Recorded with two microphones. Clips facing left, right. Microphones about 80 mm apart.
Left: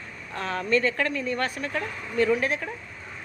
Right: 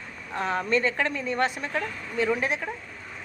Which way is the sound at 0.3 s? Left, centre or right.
Right.